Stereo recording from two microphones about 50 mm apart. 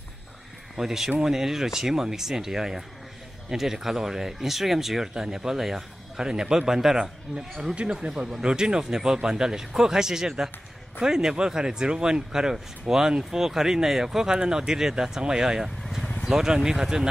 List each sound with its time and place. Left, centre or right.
0.7 s speech: centre
7.7 s speech: right
8.1 s speech: centre